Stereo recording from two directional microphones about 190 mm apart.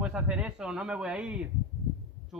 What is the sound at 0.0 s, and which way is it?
A man's voice, 5° right (ahead or behind).